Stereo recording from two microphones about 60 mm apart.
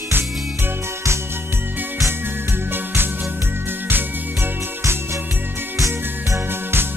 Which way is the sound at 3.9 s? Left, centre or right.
Right.